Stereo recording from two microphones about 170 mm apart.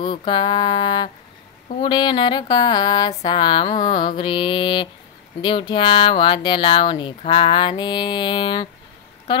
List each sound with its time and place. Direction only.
0.0 s speech: 30° left (ahead or behind)